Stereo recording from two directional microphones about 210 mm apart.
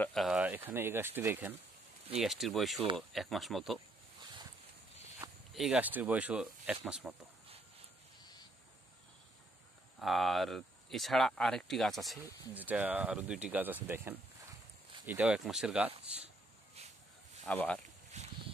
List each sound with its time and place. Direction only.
0.0 s a sound: centre (ahead or behind)
0.7 s speech: 10° right (ahead or behind)
5.2 s speech: centre (ahead or behind)
9.9 s speech: centre (ahead or behind)
17.5 s speech: 5° left (ahead or behind)
18.1 s a sound: 35° right (ahead or behind)